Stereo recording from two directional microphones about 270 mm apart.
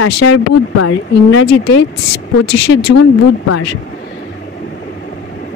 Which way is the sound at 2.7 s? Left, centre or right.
Left.